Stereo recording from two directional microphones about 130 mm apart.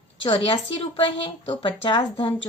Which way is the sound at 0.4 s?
45° left (ahead or behind).